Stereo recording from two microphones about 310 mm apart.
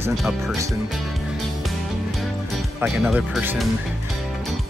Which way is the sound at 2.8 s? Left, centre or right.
Centre.